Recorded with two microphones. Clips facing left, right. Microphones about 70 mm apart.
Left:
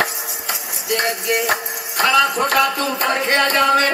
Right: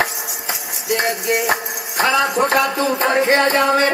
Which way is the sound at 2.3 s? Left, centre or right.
Right.